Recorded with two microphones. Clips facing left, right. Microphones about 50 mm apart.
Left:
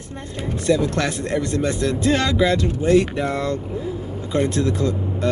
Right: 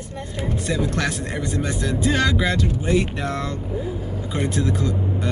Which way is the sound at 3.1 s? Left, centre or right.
Centre.